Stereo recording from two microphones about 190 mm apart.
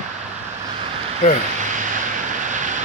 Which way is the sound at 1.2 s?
50° left (ahead or behind).